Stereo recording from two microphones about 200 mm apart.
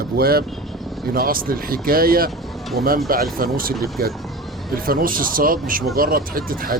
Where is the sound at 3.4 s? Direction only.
45° right (ahead or behind).